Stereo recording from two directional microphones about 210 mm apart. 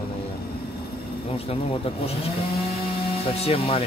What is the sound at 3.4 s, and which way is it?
Speech, 30° left (ahead or behind).